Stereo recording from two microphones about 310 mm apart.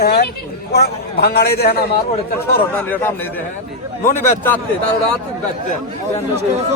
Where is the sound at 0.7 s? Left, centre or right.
Left.